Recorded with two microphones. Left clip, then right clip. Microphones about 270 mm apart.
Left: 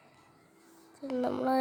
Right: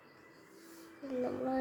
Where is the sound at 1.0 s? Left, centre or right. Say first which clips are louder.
Left 6 dB; left.